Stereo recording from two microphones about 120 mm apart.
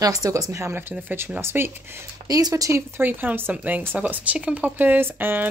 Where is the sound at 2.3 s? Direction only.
30° right (ahead or behind).